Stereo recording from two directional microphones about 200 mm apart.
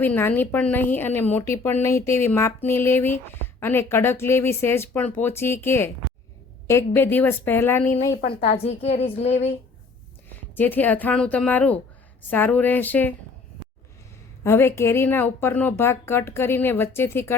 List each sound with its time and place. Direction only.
0.0 s speech: 10° left (ahead or behind)
8.3 s a woman's voice: 30° left (ahead or behind)
10.2 s a woman's voice: 10° left (ahead or behind)
14.4 s speech: 10° left (ahead or behind)